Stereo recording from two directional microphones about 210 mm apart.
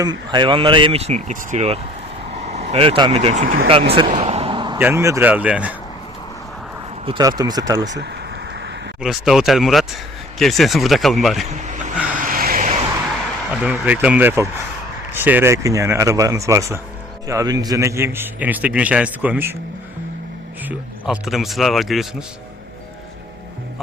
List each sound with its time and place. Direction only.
0.0 s speech: 20° right (ahead or behind); by 3.6 s 35° right (ahead or behind)
3.9 s a sound: 30° right (ahead or behind)
4.8 s a man's voice: 10° right (ahead or behind)
7.0 s speech: 20° right (ahead or behind)
7.9 s a sound: 55° right (ahead or behind)
9.0 s speech: centre (ahead or behind)
12.2 s a sound: 40° right (ahead or behind)
13.5 s a man's voice: 5° right (ahead or behind)
20.7 s speech: 5° right (ahead or behind)